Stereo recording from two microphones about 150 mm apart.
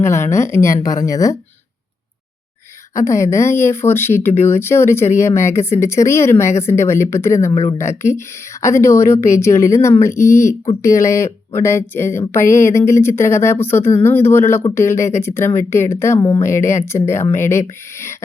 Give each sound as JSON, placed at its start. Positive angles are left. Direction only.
{"t": 0.0, "sound": "speech", "side_deg": 20}
{"t": 2.9, "sound": "speech", "side_deg": 20}